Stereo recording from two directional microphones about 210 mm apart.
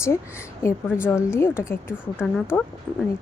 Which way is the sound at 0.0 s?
15° left (ahead or behind).